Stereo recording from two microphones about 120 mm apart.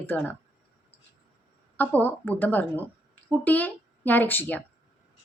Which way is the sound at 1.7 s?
15° left (ahead or behind).